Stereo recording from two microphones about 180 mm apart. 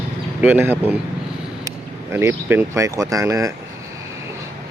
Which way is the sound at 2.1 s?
15° right (ahead or behind).